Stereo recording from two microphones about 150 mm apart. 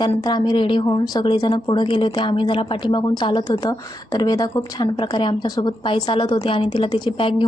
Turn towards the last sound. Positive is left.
turn(degrees=35)  # may be behind; listen again after turning